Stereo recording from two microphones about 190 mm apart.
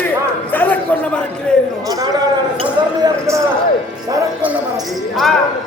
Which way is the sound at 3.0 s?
15° right (ahead or behind).